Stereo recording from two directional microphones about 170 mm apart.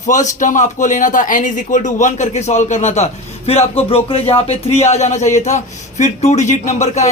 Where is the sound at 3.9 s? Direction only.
35° left (ahead or behind).